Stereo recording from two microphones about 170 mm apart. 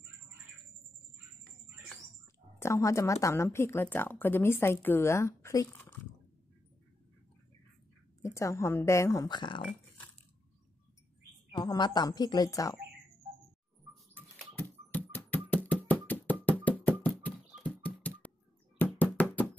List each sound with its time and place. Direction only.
2.6 s speech: 15° left (ahead or behind)
8.2 s speech: 15° left (ahead or behind)
9.6 s speech: 5° left (ahead or behind)
11.5 s a woman's voice: 25° left (ahead or behind)
14.1 s rodents: 10° left (ahead or behind)
15.5 s knock: 10° left (ahead or behind)
16.6 s a sound: 10° left (ahead or behind)
18.8 s knock: 10° left (ahead or behind)